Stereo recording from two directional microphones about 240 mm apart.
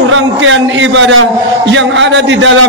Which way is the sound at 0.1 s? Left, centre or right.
Right.